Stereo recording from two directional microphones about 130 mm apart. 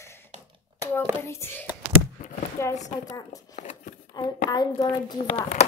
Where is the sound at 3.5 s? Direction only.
70° left (ahead or behind).